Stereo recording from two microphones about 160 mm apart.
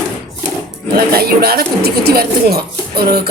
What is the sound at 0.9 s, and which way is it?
Speech, 75° right (ahead or behind).